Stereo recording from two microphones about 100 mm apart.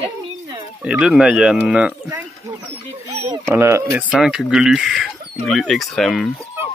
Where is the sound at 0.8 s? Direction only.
10° right (ahead or behind).